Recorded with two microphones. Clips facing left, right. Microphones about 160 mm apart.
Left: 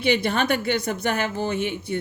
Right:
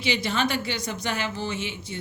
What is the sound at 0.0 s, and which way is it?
A woman's voice, 55° left (ahead or behind).